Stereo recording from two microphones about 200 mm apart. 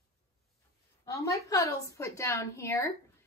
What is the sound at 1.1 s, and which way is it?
A woman's voice, 15° left (ahead or behind).